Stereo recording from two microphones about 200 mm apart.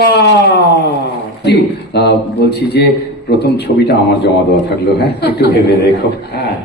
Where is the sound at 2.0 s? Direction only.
55° left (ahead or behind).